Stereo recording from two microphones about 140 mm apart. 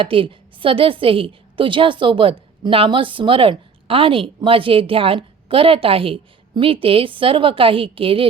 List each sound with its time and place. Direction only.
0.0 s a woman's voice: 40° right (ahead or behind)